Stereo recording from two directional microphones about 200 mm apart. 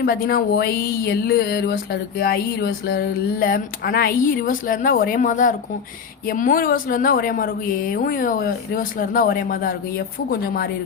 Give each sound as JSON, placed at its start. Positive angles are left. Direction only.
{"t": 0.0, "sound": "speech", "side_deg": 50}